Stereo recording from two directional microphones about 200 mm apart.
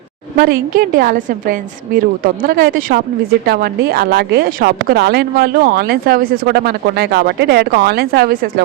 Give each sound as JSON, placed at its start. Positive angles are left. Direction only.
{"t": 0.3, "sound": "speech", "side_deg": -45}